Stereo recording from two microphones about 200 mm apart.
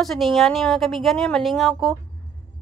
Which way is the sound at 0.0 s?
Centre (ahead or behind).